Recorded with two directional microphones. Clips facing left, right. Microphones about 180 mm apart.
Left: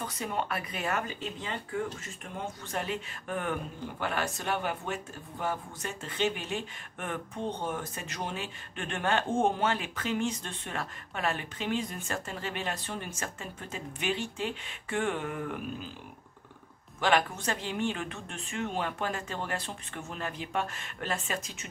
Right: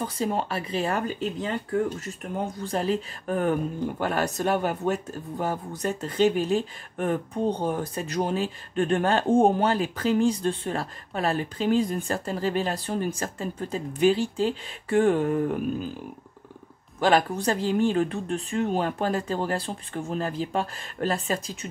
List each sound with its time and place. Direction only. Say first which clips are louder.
0.0 s speech: right 7 dB; 35° right (ahead or behind)
17.0 s speech: right 6 dB; 35° right (ahead or behind)